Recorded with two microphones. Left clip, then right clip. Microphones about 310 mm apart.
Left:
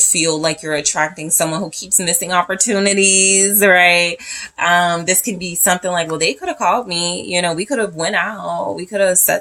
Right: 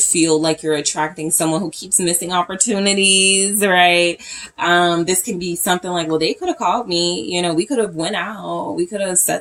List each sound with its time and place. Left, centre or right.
0.2 s speech: left